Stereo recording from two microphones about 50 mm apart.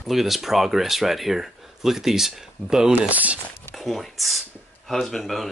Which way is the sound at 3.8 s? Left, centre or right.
Centre.